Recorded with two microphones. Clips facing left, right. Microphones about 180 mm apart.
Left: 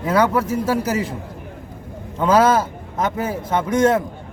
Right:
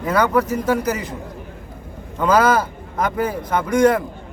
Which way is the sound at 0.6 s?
30° left (ahead or behind).